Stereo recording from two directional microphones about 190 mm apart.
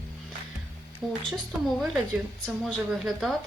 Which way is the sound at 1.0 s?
Centre (ahead or behind).